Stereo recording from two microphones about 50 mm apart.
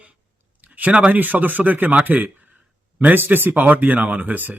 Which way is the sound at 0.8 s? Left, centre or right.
Right.